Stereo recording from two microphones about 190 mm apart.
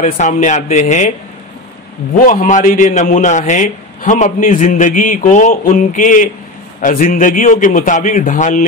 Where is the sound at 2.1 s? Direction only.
45° left (ahead or behind).